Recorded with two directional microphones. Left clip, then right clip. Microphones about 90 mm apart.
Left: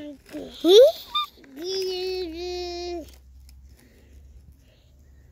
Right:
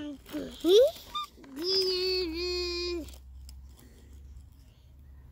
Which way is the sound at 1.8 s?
45° right (ahead or behind).